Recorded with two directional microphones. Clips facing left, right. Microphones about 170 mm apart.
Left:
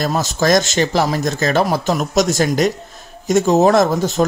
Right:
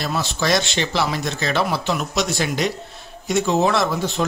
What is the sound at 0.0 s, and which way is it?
Speech, 45° left (ahead or behind).